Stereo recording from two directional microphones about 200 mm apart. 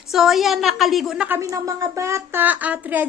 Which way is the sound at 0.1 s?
Centre (ahead or behind).